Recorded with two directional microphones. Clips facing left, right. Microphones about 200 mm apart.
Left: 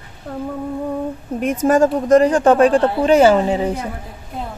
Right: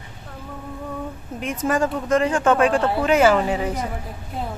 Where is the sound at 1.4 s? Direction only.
45° left (ahead or behind).